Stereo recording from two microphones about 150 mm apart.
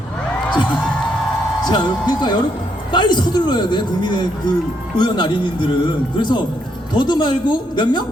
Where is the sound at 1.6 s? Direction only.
30° left (ahead or behind).